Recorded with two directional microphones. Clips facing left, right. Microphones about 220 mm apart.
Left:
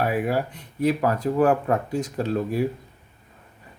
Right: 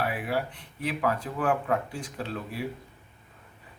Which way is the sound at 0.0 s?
45° left (ahead or behind).